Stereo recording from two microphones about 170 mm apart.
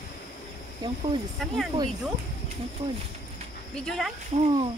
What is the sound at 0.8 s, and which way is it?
Speech, 25° right (ahead or behind).